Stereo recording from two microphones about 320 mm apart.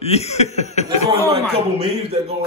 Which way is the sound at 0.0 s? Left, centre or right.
Centre.